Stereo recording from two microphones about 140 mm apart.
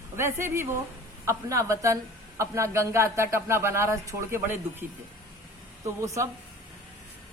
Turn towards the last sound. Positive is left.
turn(degrees=-20)  # may be behind; listen again after turning